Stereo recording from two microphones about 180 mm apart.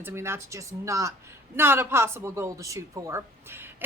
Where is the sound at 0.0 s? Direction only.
15° right (ahead or behind).